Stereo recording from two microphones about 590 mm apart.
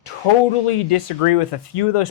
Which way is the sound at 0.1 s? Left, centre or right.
Left.